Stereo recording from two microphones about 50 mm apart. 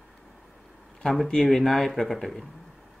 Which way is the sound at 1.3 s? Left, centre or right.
Centre.